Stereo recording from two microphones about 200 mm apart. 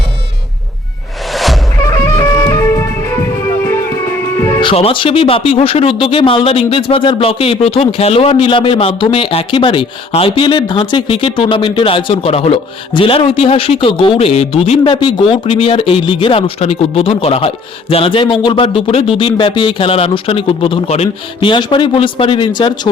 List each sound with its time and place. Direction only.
1.3 s music: centre (ahead or behind)
1.9 s music: 15° left (ahead or behind)
4.4 s music: 10° left (ahead or behind)
4.6 s speech: 30° left (ahead or behind)